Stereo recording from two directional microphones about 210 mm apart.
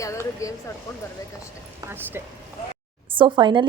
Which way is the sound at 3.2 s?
20° right (ahead or behind).